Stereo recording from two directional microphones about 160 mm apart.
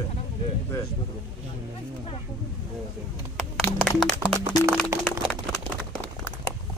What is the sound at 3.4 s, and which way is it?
Music, centre (ahead or behind).